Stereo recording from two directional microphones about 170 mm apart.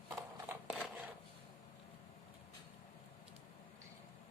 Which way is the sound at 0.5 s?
15° right (ahead or behind).